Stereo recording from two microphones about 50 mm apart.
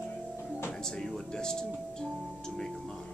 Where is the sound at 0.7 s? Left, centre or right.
Centre.